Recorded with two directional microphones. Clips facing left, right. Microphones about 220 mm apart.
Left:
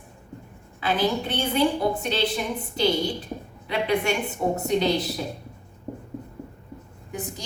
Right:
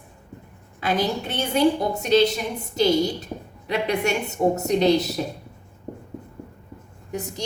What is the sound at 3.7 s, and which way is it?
A woman's voice, 40° right (ahead or behind).